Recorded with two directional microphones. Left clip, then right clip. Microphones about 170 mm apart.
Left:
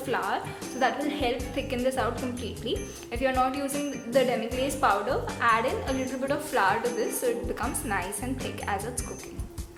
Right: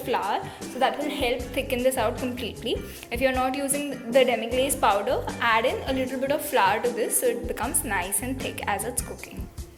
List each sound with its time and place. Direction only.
0.1 s a woman's voice: 10° right (ahead or behind)